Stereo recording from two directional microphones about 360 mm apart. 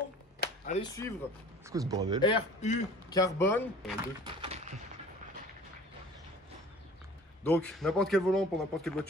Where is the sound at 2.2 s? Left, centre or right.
Centre.